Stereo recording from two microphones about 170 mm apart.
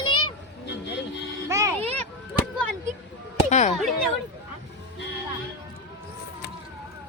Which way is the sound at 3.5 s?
45° left (ahead or behind).